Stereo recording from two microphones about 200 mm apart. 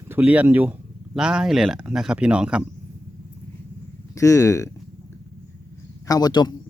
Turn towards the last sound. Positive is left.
turn(degrees=20)  # may be behind; listen again after turning